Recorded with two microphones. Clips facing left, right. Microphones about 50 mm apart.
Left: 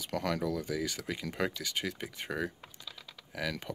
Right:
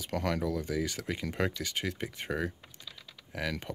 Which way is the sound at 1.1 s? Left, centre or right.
Centre.